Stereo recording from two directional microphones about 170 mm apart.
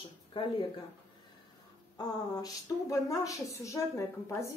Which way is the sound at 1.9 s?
20° left (ahead or behind).